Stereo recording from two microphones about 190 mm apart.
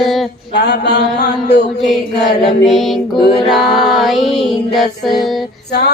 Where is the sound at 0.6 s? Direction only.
60° left (ahead or behind).